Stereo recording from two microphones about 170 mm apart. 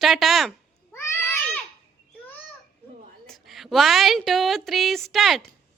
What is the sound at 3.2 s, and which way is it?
A woman's voice, centre (ahead or behind).